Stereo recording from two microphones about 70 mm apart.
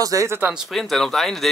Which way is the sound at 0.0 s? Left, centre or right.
Right.